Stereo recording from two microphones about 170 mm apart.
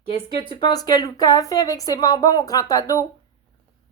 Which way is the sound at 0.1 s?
30° left (ahead or behind).